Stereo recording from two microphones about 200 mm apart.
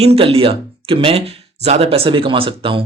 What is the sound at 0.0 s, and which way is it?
Speech, 30° right (ahead or behind).